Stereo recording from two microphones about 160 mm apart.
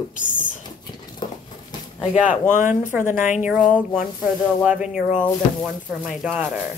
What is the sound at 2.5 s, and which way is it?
Speech, 50° left (ahead or behind).